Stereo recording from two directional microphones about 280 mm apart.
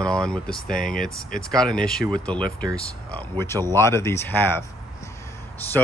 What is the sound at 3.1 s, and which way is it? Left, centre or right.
Speech, centre.